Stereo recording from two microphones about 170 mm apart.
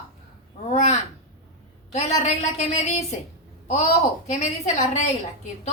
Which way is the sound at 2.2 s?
40° left (ahead or behind).